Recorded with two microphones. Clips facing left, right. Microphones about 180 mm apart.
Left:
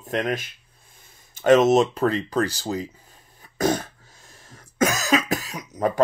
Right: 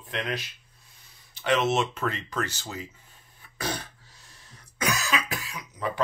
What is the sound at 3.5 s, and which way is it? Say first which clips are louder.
Cough: left 11 dB; 45° left (ahead or behind).